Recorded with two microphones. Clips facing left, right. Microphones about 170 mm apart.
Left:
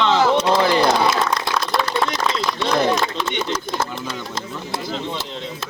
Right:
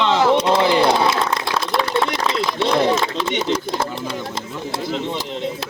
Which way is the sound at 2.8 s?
25° right (ahead or behind).